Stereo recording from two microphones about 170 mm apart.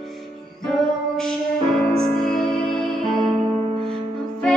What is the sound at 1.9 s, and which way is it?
Music, 5° left (ahead or behind).